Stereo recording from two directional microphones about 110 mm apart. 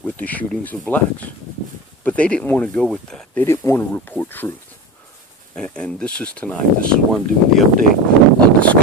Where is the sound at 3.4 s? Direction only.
25° left (ahead or behind).